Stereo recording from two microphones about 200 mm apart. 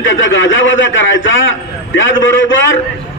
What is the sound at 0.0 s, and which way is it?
A man's voice, 70° left (ahead or behind).